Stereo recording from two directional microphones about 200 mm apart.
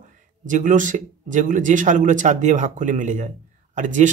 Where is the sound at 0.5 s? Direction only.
40° right (ahead or behind).